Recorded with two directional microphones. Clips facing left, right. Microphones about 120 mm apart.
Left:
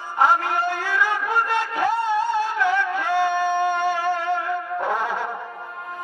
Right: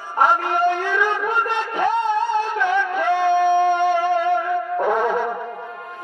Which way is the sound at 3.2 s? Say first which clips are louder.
Right 7 dB; 15° right (ahead or behind).